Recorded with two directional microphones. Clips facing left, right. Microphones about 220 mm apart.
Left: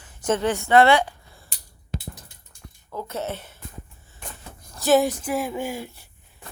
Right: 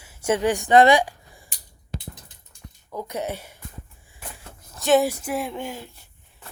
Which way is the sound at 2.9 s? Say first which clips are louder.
Right 1 dB; 15° right (ahead or behind).